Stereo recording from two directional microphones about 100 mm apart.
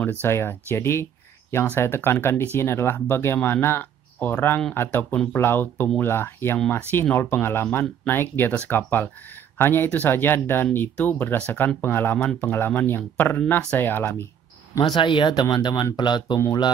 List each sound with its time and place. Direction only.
0.0 s speech: 20° left (ahead or behind)
14.8 s speech: 55° left (ahead or behind)